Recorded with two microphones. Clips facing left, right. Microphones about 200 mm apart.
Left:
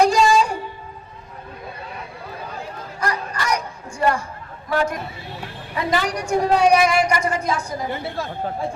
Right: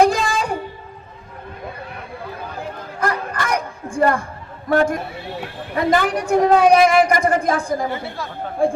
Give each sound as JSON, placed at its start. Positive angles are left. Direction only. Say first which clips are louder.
{"t": 0.0, "sound": "music", "louder": "left 1 dB", "side_deg": -55}
{"t": 3.0, "sound": "a sound", "louder": "right 3 dB", "side_deg": -55}
{"t": 4.7, "sound": "a woman's voice", "louder": "right 5 dB", "side_deg": -50}